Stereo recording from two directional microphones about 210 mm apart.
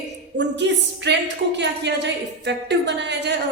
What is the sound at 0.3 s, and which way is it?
A woman's voice, 55° right (ahead or behind).